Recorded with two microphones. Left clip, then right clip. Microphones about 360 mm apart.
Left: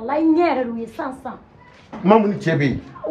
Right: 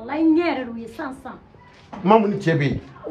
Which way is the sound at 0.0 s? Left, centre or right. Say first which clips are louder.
Left 2 dB; centre.